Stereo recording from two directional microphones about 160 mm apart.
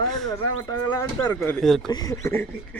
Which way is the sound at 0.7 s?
20° left (ahead or behind).